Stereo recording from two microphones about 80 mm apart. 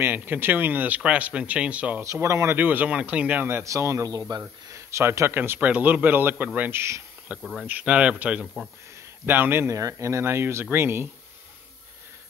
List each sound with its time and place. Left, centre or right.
0.0 s a man's voice: right
2.2 s speech: right
2.5 s a man's voice: right
3.4 s a man's voice: right
9.8 s speech: right